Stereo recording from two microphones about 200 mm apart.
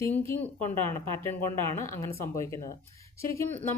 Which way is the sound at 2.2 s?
15° left (ahead or behind).